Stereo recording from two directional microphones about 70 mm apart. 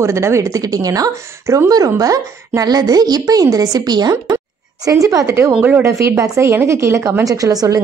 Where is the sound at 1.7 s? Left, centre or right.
Right.